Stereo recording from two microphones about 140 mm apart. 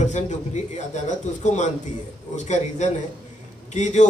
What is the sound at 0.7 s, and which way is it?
Speech, 60° left (ahead or behind).